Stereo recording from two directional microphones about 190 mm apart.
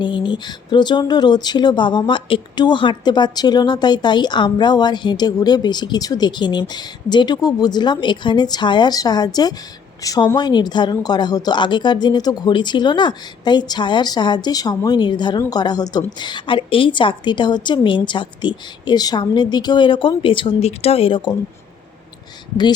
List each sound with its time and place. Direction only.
0.0 s speech: 25° left (ahead or behind)